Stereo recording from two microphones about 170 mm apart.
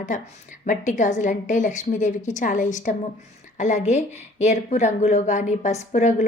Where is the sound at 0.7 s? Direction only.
45° left (ahead or behind).